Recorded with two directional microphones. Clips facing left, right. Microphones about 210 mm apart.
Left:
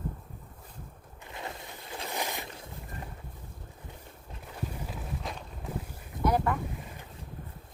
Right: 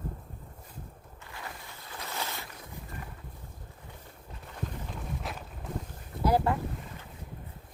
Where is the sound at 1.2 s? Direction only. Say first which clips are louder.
Left 4 dB; 20° left (ahead or behind).